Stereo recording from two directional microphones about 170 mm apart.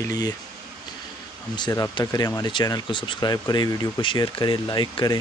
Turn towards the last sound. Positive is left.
turn(degrees=25)  # may be behind; listen again after turning